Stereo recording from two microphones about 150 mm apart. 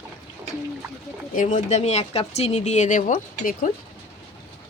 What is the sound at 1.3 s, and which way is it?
Speech, 55° left (ahead or behind).